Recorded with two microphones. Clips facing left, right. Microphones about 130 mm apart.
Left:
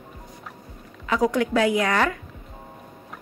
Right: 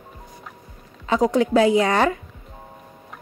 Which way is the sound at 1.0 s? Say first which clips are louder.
Right 3 dB; 25° right (ahead or behind).